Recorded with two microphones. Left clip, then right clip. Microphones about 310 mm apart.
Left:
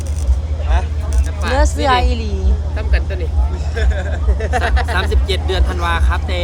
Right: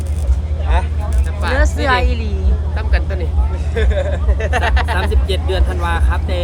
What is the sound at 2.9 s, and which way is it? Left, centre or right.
Vehicle, centre.